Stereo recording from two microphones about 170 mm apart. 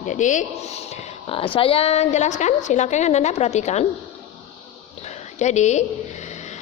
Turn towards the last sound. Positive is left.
turn(degrees=45)  # may be behind; listen again after turning